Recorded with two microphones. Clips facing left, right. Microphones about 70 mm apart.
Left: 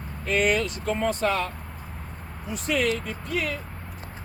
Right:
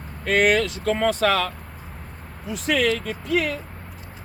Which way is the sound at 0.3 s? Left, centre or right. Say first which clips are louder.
Right 4 dB; right.